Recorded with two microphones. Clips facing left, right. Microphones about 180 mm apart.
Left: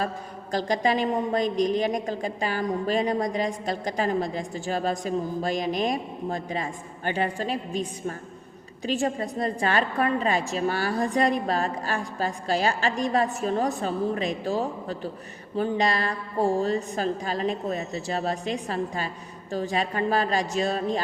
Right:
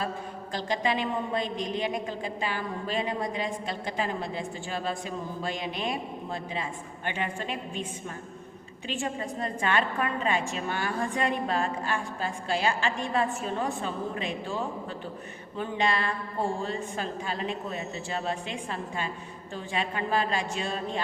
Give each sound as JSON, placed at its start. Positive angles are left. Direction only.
{"t": 0.5, "sound": "a woman's voice", "side_deg": 40}